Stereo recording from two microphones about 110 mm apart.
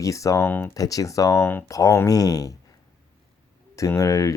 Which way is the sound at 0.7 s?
30° left (ahead or behind).